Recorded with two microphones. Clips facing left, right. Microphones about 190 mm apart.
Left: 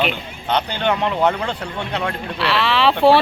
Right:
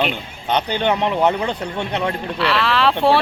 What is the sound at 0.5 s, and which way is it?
Speech, 15° right (ahead or behind).